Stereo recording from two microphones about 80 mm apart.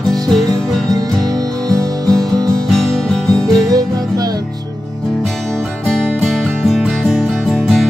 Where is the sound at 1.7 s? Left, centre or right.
Right.